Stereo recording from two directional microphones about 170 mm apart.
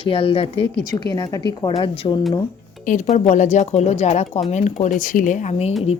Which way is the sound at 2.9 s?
45° left (ahead or behind).